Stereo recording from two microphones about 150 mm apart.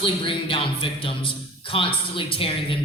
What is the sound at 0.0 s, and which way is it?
Speech, 35° left (ahead or behind).